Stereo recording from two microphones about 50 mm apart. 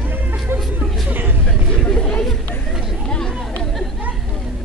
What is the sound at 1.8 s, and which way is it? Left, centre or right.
Chatter, centre.